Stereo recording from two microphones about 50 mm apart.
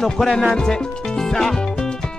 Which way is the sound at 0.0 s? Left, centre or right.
Centre.